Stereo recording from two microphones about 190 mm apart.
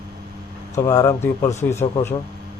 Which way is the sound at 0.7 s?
15° left (ahead or behind).